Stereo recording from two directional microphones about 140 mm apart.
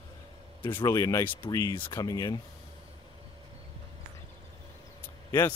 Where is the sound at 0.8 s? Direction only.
25° left (ahead or behind).